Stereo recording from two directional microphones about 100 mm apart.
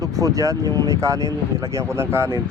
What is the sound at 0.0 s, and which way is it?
Speech, 35° right (ahead or behind).